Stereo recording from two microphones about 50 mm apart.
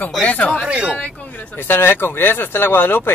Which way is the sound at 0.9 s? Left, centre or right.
Left.